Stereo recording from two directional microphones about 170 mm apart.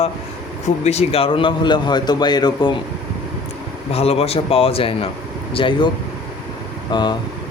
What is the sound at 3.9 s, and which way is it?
A man's voice, 35° left (ahead or behind).